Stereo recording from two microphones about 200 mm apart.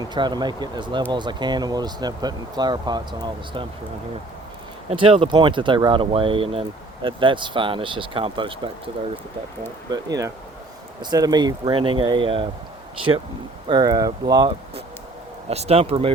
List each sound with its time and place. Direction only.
0.0 s speech: 20° right (ahead or behind)
4.9 s speech: 25° right (ahead or behind)
9.9 s speech: 15° right (ahead or behind)
13.7 s speech: 20° right (ahead or behind)
15.4 s speech: 30° right (ahead or behind)